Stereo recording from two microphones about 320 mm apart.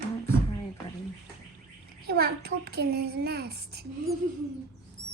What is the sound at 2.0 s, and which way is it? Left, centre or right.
A child's voice, right.